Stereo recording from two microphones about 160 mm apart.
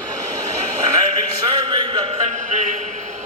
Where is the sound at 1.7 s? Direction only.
35° right (ahead or behind).